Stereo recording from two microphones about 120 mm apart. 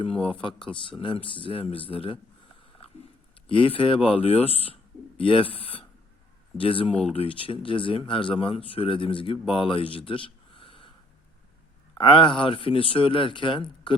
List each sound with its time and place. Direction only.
0.0 s speech: 50° left (ahead or behind)
3.4 s speech: 45° left (ahead or behind)
11.9 s speech: 45° left (ahead or behind)